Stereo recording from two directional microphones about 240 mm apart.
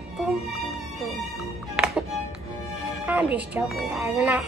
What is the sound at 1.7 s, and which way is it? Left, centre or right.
Music, centre.